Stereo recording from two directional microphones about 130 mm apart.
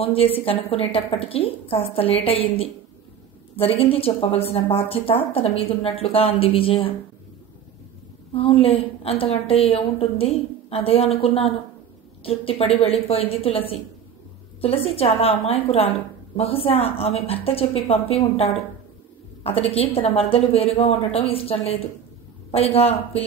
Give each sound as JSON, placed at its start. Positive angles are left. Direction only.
{"t": 0.0, "sound": "a woman's voice", "side_deg": 45}
{"t": 8.3, "sound": "a woman's voice", "side_deg": 45}